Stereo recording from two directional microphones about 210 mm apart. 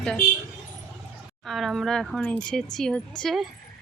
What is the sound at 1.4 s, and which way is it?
Speech, centre (ahead or behind).